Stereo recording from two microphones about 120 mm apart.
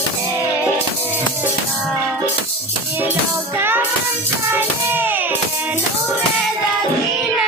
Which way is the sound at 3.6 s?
20° right (ahead or behind).